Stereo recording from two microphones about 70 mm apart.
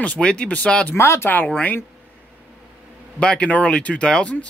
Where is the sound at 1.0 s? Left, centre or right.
Left.